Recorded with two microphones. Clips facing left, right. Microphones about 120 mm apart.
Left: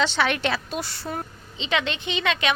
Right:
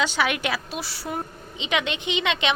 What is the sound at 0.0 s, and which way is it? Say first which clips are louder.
A woman's voice: left 1 dB; 10° right (ahead or behind).